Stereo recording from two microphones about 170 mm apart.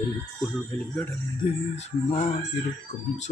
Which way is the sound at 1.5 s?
35° left (ahead or behind).